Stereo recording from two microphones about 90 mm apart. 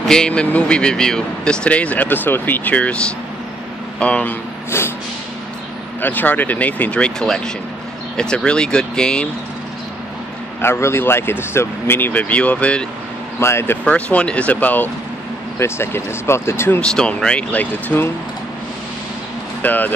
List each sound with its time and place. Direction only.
0.0 s speech: 10° left (ahead or behind)
4.0 s speech: 15° left (ahead or behind)
4.6 s speech: 30° left (ahead or behind)
5.9 s speech: 20° left (ahead or behind)
10.6 s speech: 30° left (ahead or behind)
13.4 s speech: 30° left (ahead or behind)
13.8 s speech: 15° left (ahead or behind)
15.6 s speech: 30° left (ahead or behind)
16.9 s speech: 10° left (ahead or behind)
19.6 s speech: 20° left (ahead or behind)